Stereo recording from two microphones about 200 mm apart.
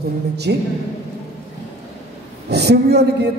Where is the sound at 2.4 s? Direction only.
55° right (ahead or behind).